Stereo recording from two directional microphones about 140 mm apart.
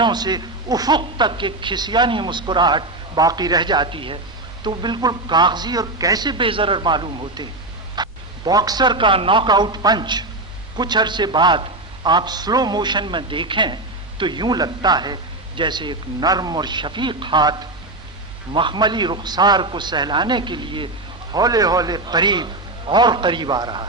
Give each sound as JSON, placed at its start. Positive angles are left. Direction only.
{"t": 0.0, "sound": "speech", "side_deg": -30}